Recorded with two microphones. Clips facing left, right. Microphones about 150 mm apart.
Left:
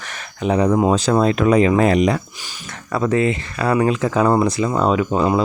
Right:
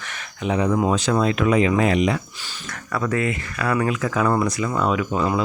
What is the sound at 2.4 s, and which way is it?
Speech, 25° left (ahead or behind).